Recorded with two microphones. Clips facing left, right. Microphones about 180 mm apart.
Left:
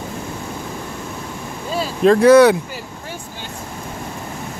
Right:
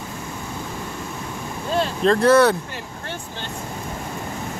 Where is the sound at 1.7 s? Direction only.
5° left (ahead or behind).